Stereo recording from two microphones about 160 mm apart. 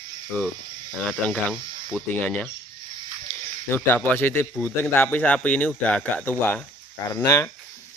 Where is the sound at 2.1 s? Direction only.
10° left (ahead or behind).